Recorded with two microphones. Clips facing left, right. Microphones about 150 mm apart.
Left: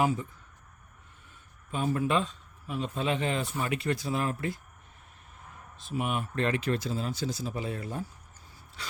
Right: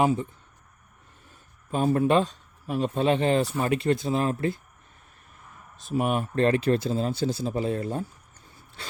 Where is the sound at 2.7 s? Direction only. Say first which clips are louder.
Right 7 dB; 45° right (ahead or behind); by 4.6 s 25° right (ahead or behind).